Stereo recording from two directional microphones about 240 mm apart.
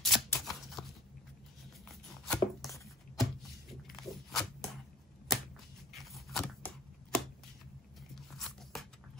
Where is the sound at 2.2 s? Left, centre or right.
Centre.